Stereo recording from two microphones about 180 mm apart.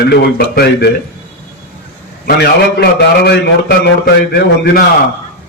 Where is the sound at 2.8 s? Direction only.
70° left (ahead or behind).